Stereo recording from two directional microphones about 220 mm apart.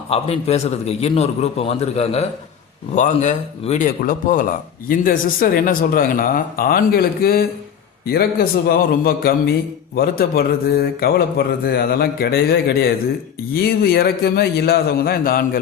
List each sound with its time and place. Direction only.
0.1 s a man's voice: 30° left (ahead or behind)